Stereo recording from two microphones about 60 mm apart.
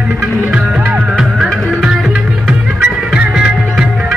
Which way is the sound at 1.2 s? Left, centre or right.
Centre.